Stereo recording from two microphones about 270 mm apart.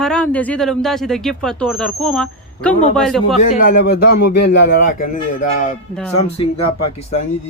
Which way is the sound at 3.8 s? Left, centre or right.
Left.